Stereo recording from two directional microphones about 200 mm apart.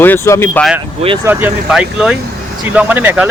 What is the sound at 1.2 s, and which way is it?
Speech, 10° right (ahead or behind).